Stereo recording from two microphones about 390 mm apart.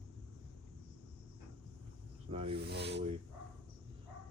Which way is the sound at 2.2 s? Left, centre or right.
Centre.